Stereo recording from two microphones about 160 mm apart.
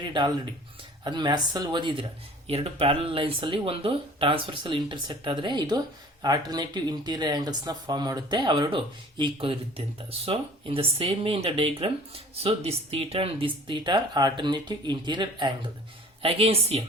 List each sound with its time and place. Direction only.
0.1 s speech: 30° right (ahead or behind)